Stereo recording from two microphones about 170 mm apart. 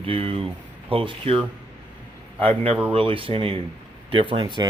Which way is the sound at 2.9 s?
30° right (ahead or behind).